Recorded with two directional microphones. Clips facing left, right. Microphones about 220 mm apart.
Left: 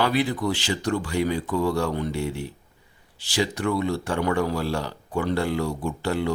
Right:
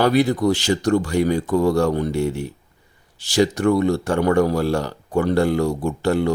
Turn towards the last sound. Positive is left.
turn(degrees=-45)  # may be behind; listen again after turning